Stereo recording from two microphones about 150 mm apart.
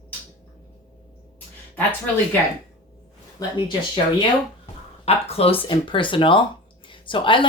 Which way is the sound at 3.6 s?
30° left (ahead or behind).